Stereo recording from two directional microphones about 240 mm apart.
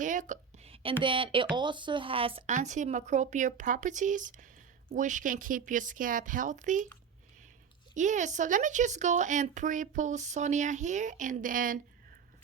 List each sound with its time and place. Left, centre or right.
0.0 s a woman's voice: right
7.9 s speech: right